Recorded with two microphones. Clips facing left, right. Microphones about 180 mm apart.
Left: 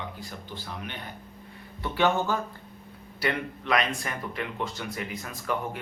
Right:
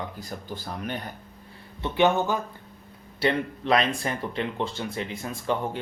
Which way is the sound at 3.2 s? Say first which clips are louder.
Right 5 dB; 30° right (ahead or behind).